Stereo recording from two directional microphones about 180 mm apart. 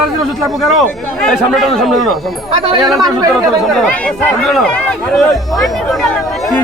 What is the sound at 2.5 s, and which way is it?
Speech, 30° right (ahead or behind).